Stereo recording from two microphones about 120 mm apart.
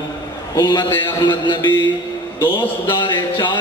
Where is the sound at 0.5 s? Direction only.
40° left (ahead or behind).